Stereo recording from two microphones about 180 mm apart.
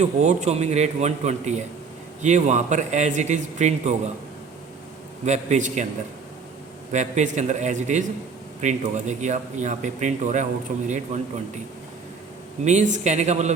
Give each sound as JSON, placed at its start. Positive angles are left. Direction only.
{"t": 0.0, "sound": "speech", "side_deg": -40}
{"t": 5.2, "sound": "speech", "side_deg": -40}
{"t": 6.9, "sound": "speech", "side_deg": -40}
{"t": 12.6, "sound": "speech", "side_deg": -40}